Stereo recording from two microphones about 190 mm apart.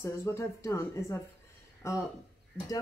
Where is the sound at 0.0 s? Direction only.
15° left (ahead or behind).